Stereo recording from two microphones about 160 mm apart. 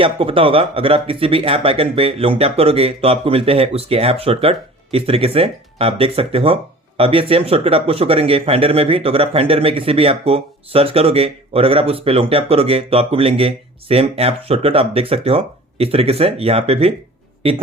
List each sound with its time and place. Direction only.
0.0 s speech: 35° right (ahead or behind)